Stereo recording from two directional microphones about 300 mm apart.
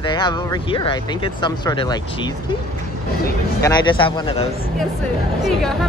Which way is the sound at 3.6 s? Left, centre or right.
Centre.